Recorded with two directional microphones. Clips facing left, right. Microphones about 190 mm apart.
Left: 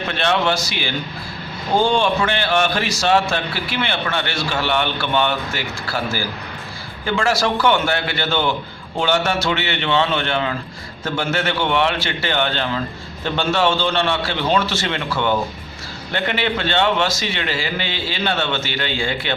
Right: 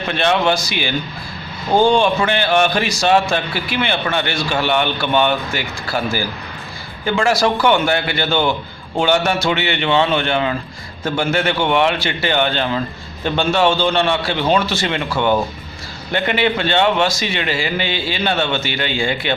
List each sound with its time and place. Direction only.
0.2 s a man's voice: 15° right (ahead or behind)